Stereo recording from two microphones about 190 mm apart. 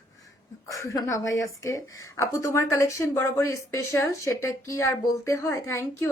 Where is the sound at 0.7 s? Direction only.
15° left (ahead or behind).